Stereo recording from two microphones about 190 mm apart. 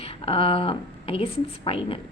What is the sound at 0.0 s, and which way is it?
A woman's voice, 30° left (ahead or behind).